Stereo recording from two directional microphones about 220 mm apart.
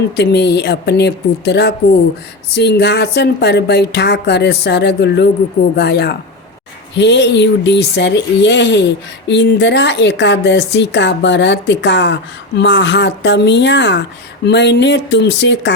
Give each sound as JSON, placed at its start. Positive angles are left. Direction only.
{"t": 0.2, "sound": "speech", "side_deg": 50}